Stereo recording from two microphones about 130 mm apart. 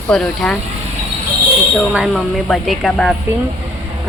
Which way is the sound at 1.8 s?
5° right (ahead or behind).